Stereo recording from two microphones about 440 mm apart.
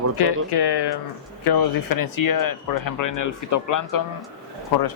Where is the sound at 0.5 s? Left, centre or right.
Left.